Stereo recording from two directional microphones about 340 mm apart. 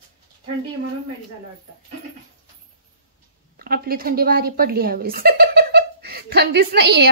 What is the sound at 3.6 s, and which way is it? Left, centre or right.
Speech, right.